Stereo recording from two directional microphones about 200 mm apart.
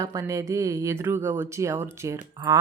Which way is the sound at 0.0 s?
15° right (ahead or behind).